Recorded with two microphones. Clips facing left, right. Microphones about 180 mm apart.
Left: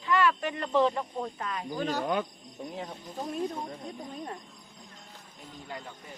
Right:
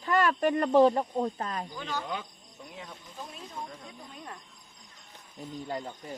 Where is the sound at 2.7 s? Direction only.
35° left (ahead or behind).